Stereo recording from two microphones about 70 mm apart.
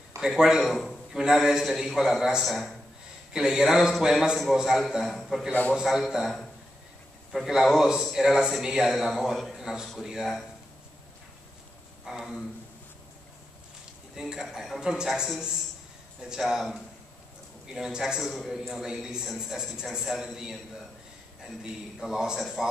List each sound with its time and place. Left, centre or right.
0.2 s a man's voice: centre
5.5 s a man's voice: left
5.8 s a man's voice: centre
12.0 s speech: centre
14.1 s a man's voice: centre
22.0 s a man's voice: centre